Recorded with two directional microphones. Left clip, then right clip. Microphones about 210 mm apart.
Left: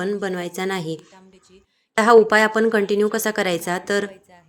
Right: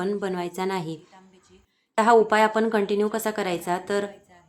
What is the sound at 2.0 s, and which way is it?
Speech, 15° left (ahead or behind).